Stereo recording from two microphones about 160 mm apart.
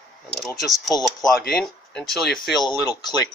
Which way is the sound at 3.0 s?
25° left (ahead or behind).